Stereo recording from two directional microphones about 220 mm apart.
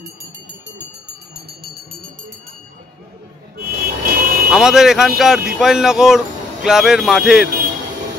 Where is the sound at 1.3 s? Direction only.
45° right (ahead or behind).